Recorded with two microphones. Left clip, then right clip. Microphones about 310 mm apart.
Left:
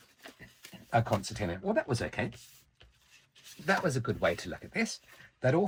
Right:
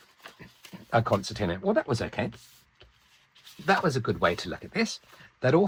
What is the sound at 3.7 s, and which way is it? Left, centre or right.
Speech, centre.